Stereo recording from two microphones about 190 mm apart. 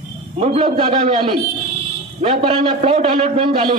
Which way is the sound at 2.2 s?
25° right (ahead or behind).